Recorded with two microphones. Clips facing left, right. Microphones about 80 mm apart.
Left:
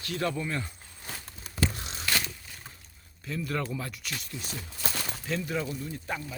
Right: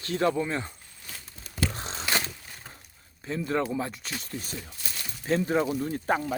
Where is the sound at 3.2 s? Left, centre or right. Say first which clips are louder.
Right 4 dB; right.